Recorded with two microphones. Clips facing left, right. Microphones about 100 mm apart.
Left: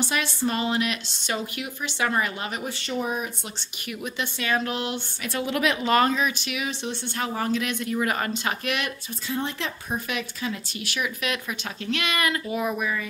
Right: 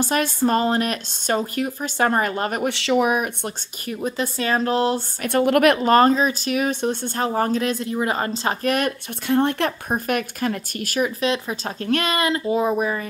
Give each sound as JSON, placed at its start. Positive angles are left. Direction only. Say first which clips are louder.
{"t": 0.0, "sound": "speech", "louder": "right 6 dB", "side_deg": -45}
{"t": 2.7, "sound": "speech", "louder": "right 10 dB", "side_deg": -90}
{"t": 4.0, "sound": "speech", "louder": "right 7 dB", "side_deg": -35}
{"t": 5.2, "sound": "a woman's voice", "louder": "right 9 dB", "side_deg": -55}
{"t": 5.8, "sound": "speech", "louder": "right 6 dB", "side_deg": -40}
{"t": 9.3, "sound": "speech", "louder": "right 10 dB", "side_deg": -55}
{"t": 11.8, "sound": "speech", "louder": "right 6 dB", "side_deg": -45}
{"t": 12.2, "sound": "speech", "louder": "right 6 dB", "side_deg": -30}